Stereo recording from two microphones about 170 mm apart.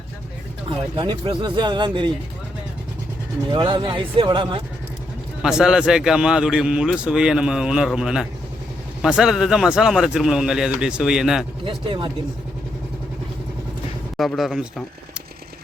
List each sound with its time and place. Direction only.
0.9 s speech: 30° right (ahead or behind)
3.5 s speech: 30° right (ahead or behind)
5.4 s speech: 5° right (ahead or behind)
11.6 s speech: 30° right (ahead or behind)
14.2 s speech: centre (ahead or behind)